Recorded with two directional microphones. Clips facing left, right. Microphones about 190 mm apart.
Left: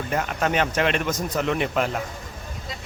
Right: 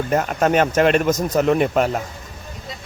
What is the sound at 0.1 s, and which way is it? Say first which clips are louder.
Speech: right 6 dB; 45° right (ahead or behind).